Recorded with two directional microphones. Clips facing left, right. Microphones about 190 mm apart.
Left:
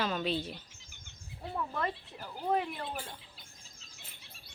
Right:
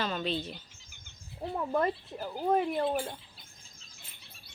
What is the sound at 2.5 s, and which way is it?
Speech, 40° right (ahead or behind).